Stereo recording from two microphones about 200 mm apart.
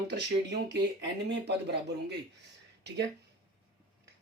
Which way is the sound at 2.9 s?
60° right (ahead or behind).